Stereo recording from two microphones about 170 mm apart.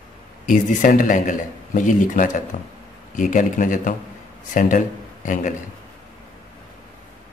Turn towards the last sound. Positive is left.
turn(degrees=50)  # may be behind; listen again after turning